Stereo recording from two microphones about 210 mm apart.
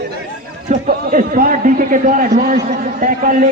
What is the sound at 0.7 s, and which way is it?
A man's voice, 40° right (ahead or behind).